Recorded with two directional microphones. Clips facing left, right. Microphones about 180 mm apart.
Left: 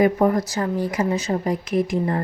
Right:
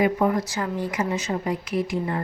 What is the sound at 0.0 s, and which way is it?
Speech, 40° left (ahead or behind).